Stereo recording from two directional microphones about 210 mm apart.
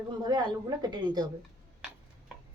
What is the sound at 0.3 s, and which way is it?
A woman's voice, 20° right (ahead or behind).